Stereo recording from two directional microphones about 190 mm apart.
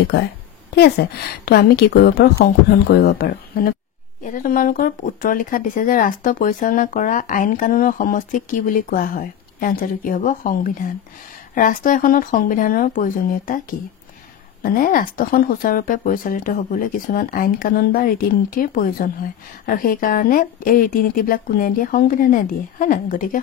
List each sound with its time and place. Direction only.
0.7 s a woman's voice: 55° left (ahead or behind)